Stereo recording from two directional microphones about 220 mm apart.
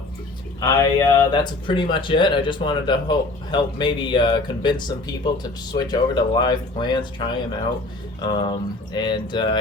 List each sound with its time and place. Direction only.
0.6 s speech: 20° left (ahead or behind)
8.4 s speech: 20° left (ahead or behind)